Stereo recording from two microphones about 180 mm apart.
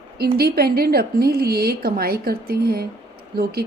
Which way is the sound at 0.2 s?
60° right (ahead or behind).